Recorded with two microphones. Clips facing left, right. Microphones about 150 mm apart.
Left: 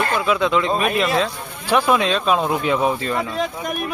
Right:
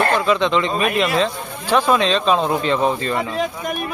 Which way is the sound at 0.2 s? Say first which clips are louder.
Right 1 dB; 5° left (ahead or behind).